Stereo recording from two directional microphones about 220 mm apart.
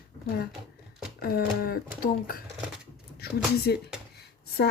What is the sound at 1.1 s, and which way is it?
Speech, 45° left (ahead or behind).